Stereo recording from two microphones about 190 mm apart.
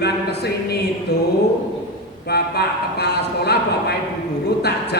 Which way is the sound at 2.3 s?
60° left (ahead or behind).